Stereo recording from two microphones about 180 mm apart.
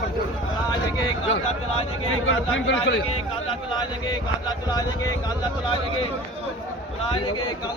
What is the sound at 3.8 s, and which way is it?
Speech, 20° left (ahead or behind).